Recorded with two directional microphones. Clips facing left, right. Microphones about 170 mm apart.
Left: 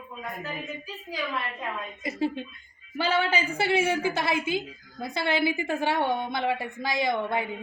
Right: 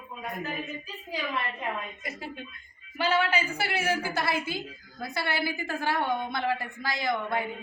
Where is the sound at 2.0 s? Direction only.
25° left (ahead or behind).